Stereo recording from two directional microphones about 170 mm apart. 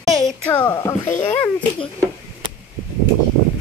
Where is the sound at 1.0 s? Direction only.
45° left (ahead or behind).